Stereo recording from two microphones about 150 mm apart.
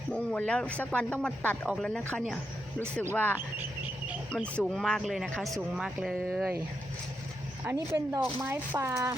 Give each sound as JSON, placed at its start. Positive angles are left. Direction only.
{"t": 0.1, "sound": "speech", "side_deg": 5}
{"t": 4.5, "sound": "speech", "side_deg": 0}
{"t": 7.6, "sound": "speech", "side_deg": -15}